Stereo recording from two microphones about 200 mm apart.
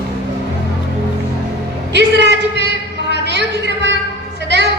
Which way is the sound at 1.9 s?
60° right (ahead or behind).